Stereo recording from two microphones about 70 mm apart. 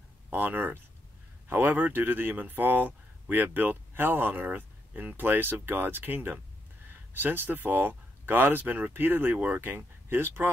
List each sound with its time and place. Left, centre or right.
0.3 s speech: right